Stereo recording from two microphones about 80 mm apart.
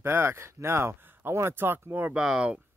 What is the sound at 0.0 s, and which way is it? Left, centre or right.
Speech, right.